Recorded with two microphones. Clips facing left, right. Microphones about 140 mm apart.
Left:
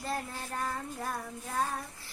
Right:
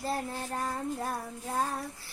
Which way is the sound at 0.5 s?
30° right (ahead or behind).